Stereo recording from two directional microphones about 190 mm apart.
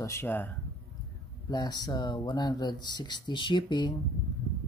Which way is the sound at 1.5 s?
20° left (ahead or behind).